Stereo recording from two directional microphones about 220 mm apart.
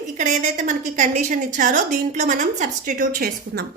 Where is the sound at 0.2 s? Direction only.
35° right (ahead or behind).